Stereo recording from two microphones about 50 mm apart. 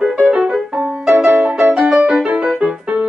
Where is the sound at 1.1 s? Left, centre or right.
Right.